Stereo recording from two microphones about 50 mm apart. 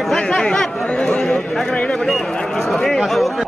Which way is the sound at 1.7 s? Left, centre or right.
Left.